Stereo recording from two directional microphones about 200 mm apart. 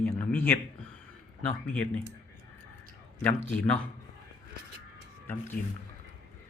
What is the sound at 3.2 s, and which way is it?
Speech, 10° left (ahead or behind).